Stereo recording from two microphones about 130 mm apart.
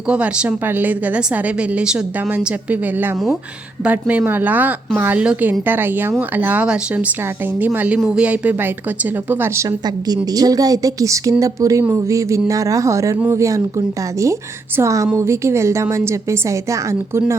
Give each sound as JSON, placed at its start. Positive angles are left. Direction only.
{"t": 0.1, "sound": "a woman's voice", "side_deg": -10}
{"t": 9.6, "sound": "a woman's voice", "side_deg": -30}